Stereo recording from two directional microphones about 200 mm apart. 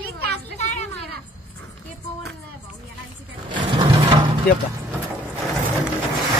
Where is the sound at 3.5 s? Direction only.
25° right (ahead or behind).